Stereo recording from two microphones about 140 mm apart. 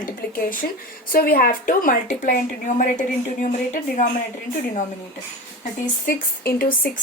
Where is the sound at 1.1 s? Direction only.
90° left; by 3.0 s 65° left (ahead or behind).